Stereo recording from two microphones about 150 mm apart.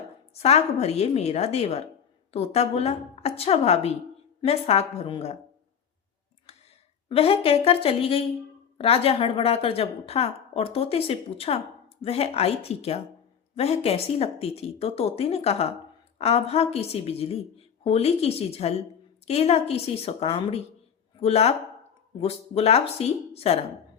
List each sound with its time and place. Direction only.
0.3 s speech: 45° left (ahead or behind)
7.1 s a woman's voice: 40° left (ahead or behind)